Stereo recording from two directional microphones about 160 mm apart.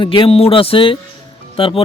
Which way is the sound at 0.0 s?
30° left (ahead or behind).